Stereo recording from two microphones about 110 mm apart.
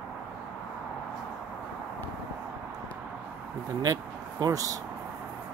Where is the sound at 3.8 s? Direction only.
35° right (ahead or behind).